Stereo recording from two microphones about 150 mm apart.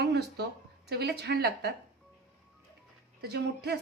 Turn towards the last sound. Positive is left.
turn(degrees=-90)